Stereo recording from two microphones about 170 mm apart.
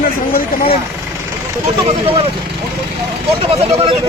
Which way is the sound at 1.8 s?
35° right (ahead or behind).